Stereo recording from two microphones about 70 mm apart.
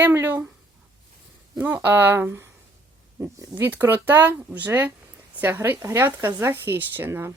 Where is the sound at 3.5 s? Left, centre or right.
Right.